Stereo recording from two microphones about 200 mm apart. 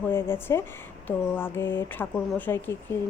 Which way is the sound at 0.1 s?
10° left (ahead or behind).